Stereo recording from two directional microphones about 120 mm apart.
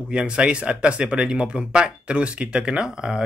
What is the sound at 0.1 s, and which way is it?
Speech, 10° right (ahead or behind).